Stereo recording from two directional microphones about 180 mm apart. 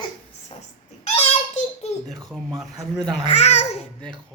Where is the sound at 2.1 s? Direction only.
Centre (ahead or behind).